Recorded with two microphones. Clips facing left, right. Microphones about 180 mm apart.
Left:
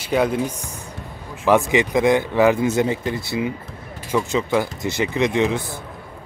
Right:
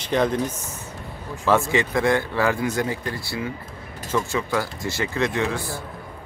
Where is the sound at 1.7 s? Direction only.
15° left (ahead or behind).